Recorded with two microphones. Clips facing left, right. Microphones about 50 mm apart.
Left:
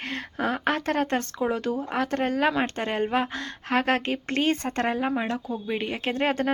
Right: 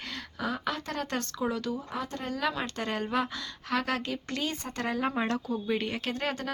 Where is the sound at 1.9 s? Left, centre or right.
Left.